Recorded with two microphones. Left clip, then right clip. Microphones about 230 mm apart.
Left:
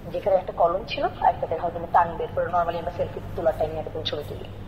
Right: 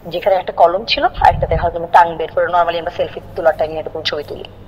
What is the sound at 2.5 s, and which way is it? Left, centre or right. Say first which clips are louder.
Speech: right 9 dB; right.